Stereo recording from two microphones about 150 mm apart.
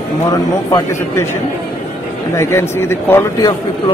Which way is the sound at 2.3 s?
15° left (ahead or behind).